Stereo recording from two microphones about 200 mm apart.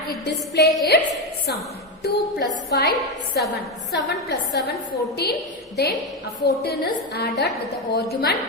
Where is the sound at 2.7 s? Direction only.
55° left (ahead or behind).